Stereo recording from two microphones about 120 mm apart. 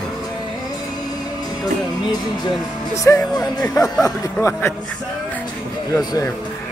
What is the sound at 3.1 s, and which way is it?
Speech, 25° left (ahead or behind).